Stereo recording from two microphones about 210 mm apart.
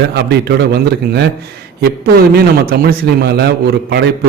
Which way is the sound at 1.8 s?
50° right (ahead or behind).